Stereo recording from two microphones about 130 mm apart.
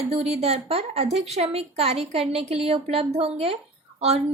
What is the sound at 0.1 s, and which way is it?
A woman's voice, 55° right (ahead or behind).